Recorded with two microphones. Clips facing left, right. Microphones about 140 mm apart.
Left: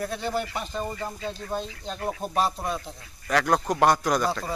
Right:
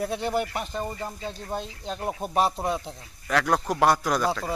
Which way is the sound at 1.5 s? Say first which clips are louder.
Even; 15° right (ahead or behind).